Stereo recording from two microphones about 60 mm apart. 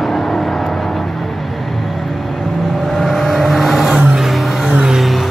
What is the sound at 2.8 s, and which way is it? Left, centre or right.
Vehicle, centre.